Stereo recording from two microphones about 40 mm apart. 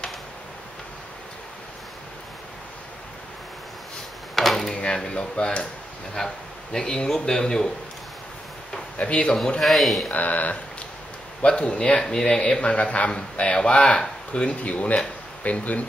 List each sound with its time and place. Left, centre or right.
4.4 s a sound: centre
4.9 s speech: left
6.1 s speech: centre
8.9 s speech: left
9.6 s speech: centre
10.1 s speech: left
11.4 s speech: left
14.6 s speech: left